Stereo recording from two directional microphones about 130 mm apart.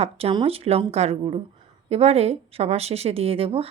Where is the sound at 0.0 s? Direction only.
50° right (ahead or behind).